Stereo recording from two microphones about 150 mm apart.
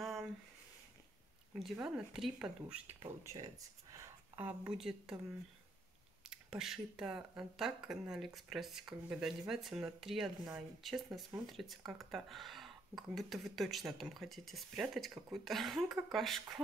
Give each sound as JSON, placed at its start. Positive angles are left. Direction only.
{"t": 0.0, "sound": "a sound", "side_deg": 0}
{"t": 1.8, "sound": "speech", "side_deg": -5}
{"t": 3.3, "sound": "speech", "side_deg": -25}
{"t": 4.4, "sound": "speech", "side_deg": -10}
{"t": 6.2, "sound": "speech", "side_deg": -5}